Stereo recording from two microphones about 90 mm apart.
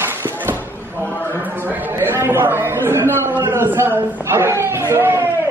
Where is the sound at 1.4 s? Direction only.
20° right (ahead or behind).